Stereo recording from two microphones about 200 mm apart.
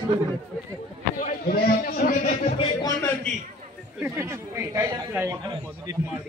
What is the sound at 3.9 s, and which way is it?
A man's voice, 10° right (ahead or behind).